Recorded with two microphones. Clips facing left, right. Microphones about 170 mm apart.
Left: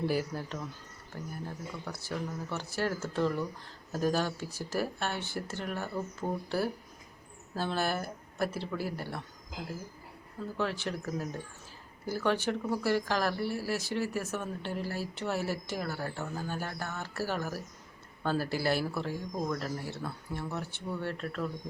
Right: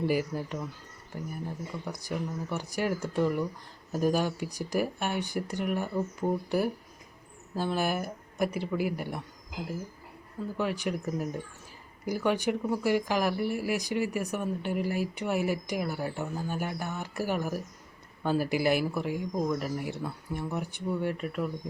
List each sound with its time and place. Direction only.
0.0 s speech: 10° right (ahead or behind)
10.6 s speech: 10° right (ahead or behind)